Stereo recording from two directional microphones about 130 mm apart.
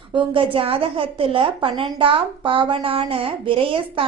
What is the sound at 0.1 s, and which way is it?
A woman's voice, 40° right (ahead or behind).